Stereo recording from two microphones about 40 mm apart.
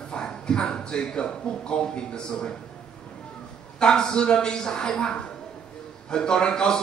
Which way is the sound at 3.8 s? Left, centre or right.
Centre.